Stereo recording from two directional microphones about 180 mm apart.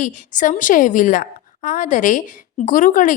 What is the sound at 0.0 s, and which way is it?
A woman's voice, 45° left (ahead or behind).